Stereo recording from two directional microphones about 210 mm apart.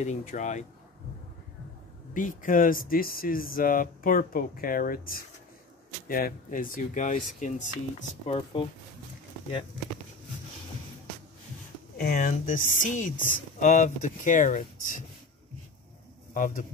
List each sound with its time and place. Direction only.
0.0 s speech: 35° left (ahead or behind)
2.1 s speech: 40° left (ahead or behind)
12.0 s speech: 40° left (ahead or behind)
16.3 s speech: 40° left (ahead or behind)